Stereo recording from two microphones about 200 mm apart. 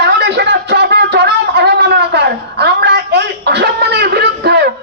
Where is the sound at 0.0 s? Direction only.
60° right (ahead or behind).